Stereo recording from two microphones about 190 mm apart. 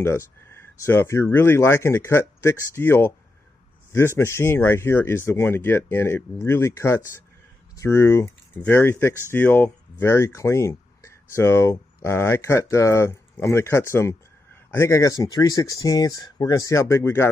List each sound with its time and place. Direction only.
0.0 s speech: 15° left (ahead or behind)